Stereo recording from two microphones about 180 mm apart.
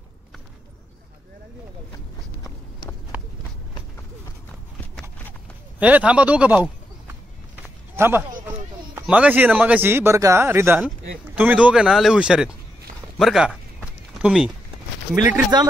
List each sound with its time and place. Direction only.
5.8 s speech: 10° right (ahead or behind)
7.9 s a sound: 10° right (ahead or behind)
8.5 s speech: 10° right (ahead or behind)
15.5 s speech: 25° right (ahead or behind)